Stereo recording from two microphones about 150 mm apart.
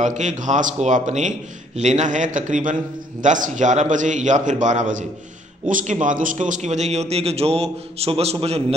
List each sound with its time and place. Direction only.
0.0 s a man's voice: 55° right (ahead or behind)